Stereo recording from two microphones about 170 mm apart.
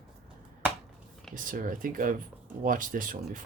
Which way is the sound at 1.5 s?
55° right (ahead or behind).